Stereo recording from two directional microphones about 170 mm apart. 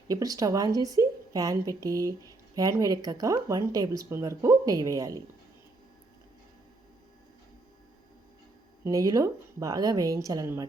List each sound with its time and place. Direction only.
0.1 s a woman's voice: 20° right (ahead or behind)
8.8 s a woman's voice: 20° right (ahead or behind)